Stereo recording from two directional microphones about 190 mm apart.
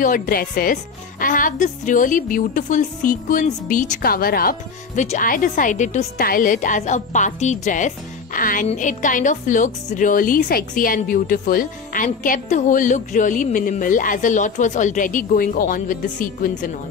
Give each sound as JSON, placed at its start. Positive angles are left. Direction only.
{"t": 0.0, "sound": "speech", "side_deg": 45}